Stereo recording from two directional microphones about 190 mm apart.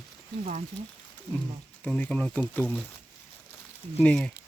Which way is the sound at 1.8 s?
5° left (ahead or behind).